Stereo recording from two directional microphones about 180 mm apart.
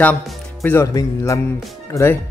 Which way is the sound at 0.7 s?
15° left (ahead or behind).